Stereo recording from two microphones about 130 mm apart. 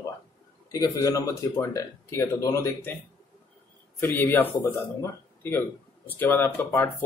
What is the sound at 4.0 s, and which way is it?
Speech, 15° left (ahead or behind).